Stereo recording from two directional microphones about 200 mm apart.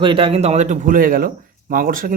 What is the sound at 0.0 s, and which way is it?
A man's voice, 25° right (ahead or behind).